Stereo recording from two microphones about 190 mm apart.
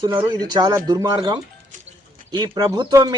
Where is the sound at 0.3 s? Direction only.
20° right (ahead or behind).